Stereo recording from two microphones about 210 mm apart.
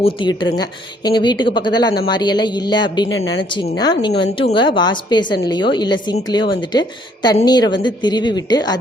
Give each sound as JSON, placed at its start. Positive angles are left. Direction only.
{"t": 0.0, "sound": "a woman's voice", "side_deg": 25}
{"t": 3.1, "sound": "speech", "side_deg": 65}
{"t": 3.5, "sound": "a woman's voice", "side_deg": 20}